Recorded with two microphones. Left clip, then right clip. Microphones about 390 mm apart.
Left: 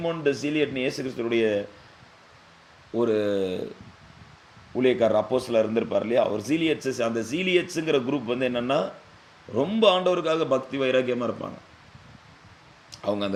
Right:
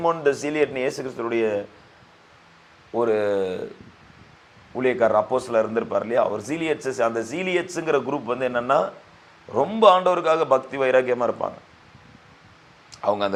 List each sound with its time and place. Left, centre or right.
0.0 s a man's voice: right
3.0 s a man's voice: right
4.7 s a man's voice: right
12.9 s speech: right